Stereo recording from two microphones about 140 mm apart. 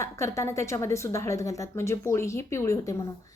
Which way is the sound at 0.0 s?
20° left (ahead or behind).